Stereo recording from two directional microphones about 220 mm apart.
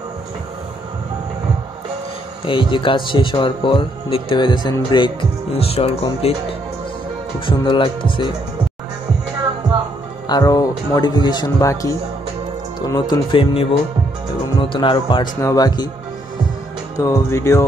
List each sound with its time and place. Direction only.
2.4 s speech: 25° left (ahead or behind)
7.3 s speech: 20° left (ahead or behind)
10.2 s speech: 15° left (ahead or behind)
16.9 s speech: 15° left (ahead or behind)